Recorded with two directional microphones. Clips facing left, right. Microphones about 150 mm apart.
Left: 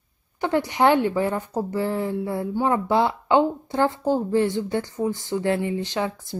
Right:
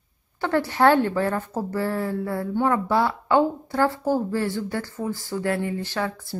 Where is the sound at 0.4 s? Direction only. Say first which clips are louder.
Even; 15° left (ahead or behind).